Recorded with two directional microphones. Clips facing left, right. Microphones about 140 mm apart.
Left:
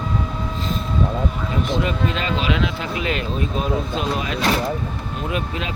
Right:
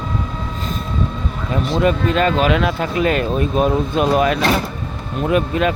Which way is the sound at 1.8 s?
50° right (ahead or behind).